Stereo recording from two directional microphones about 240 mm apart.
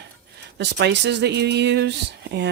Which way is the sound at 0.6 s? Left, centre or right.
Right.